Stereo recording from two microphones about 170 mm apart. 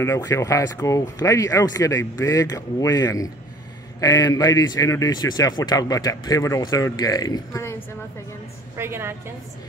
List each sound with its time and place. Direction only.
0.0 s speech: 15° left (ahead or behind)
8.7 s a woman's voice: 15° right (ahead or behind)